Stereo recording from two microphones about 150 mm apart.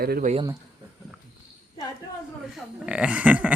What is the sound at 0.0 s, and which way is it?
Speech, 90° right.